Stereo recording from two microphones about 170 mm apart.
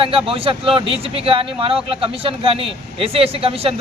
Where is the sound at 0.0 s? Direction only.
30° right (ahead or behind).